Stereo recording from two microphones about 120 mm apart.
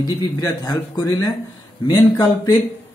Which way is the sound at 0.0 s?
35° left (ahead or behind).